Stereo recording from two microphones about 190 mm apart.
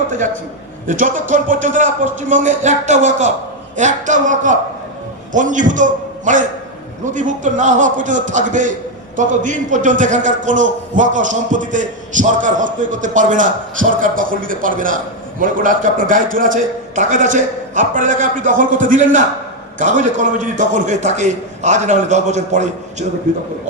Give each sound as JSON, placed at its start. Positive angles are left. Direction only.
{"t": 0.9, "sound": "a man's voice", "side_deg": -40}